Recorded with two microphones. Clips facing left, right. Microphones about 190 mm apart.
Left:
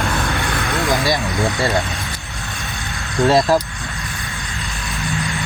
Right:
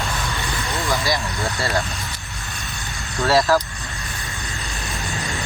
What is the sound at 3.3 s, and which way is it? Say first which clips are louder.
Speech: left 2 dB; 20° left (ahead or behind).